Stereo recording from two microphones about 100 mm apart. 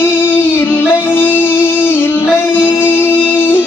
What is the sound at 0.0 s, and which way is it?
Music, 20° left (ahead or behind).